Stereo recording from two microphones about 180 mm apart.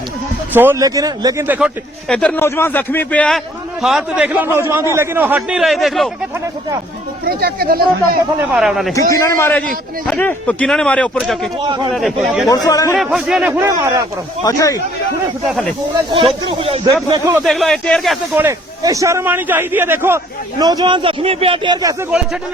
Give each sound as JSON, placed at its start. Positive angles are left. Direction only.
{"t": 0.5, "sound": "speech", "side_deg": -10}
{"t": 2.0, "sound": "a man's voice", "side_deg": 5}
{"t": 7.3, "sound": "speech", "side_deg": -60}
{"t": 8.5, "sound": "a man's voice", "side_deg": 0}
{"t": 9.0, "sound": "a man's voice", "side_deg": 15}
{"t": 12.5, "sound": "speech", "side_deg": 20}
{"t": 13.0, "sound": "speech", "side_deg": 0}
{"t": 14.4, "sound": "speech", "side_deg": 20}
{"t": 15.4, "sound": "a man's voice", "side_deg": 0}
{"t": 16.6, "sound": "speech", "side_deg": -35}
{"t": 16.8, "sound": "speech", "side_deg": -15}
{"t": 17.4, "sound": "a man's voice", "side_deg": 0}
{"t": 18.3, "sound": "a man's voice", "side_deg": -15}